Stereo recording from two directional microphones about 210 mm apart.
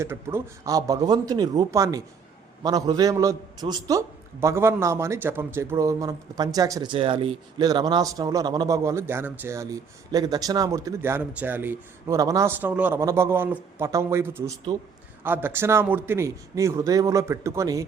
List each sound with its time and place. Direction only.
0.0 s a man's voice: 10° right (ahead or behind)